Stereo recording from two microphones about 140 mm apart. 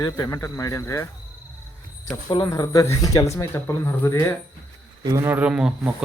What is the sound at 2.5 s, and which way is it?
Speech, 25° left (ahead or behind).